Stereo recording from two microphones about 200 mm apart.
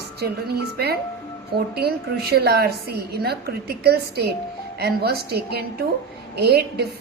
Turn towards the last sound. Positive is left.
turn(degrees=-55)  # may be behind; listen again after turning